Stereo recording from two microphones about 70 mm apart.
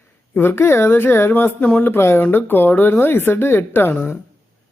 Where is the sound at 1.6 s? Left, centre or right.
Centre.